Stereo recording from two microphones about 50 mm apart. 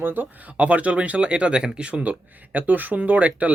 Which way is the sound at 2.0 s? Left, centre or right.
Right.